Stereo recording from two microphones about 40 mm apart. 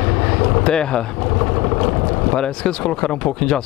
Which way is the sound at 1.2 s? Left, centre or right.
Centre.